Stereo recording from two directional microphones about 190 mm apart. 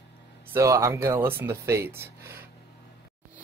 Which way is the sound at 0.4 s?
15° right (ahead or behind).